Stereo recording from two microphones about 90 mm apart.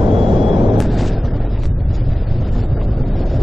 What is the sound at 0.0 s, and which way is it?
Vehicle, 70° right (ahead or behind).